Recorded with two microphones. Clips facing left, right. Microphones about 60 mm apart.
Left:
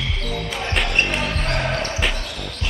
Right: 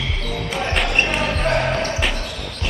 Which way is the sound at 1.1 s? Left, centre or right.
Centre.